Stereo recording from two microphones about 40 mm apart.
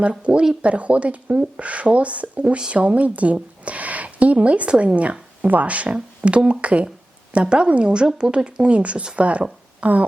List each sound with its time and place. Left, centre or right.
0.0 s speech: right